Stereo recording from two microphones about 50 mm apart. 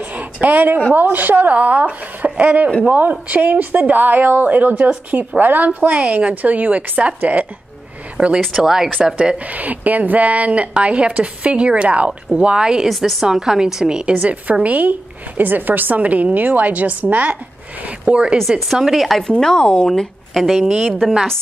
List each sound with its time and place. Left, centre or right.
0.0 s a sound: right
1.1 s a woman's voice: right
8.4 s speech: centre
9.1 s speech: centre
9.5 s a woman's voice: right; by 12.8 s centre
12.8 s a woman's voice: centre; by 18.4 s right
18.5 s speech: centre
19.3 s speech: centre
20.3 s speech: centre